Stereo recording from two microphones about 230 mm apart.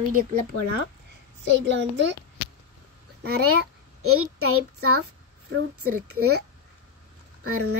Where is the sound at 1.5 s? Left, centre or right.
Right.